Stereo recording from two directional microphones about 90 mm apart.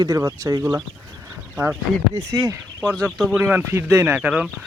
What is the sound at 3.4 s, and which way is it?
Speech, 30° right (ahead or behind).